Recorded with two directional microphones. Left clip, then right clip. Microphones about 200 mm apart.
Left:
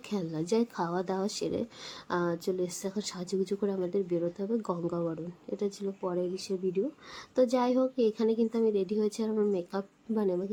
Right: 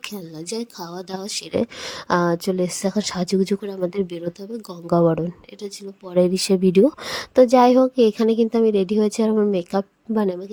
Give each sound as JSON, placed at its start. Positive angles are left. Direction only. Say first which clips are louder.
{"t": 0.1, "sound": "a woman's voice", "louder": "even", "side_deg": 0}
{"t": 1.3, "sound": "speech", "louder": "right 9 dB", "side_deg": -40}